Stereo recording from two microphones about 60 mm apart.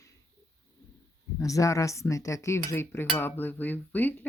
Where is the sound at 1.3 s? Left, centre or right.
Left.